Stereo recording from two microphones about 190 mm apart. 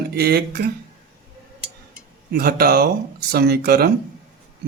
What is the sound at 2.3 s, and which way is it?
Speech, 55° right (ahead or behind).